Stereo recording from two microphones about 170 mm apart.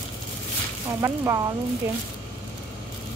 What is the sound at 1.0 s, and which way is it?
Speech, 15° right (ahead or behind).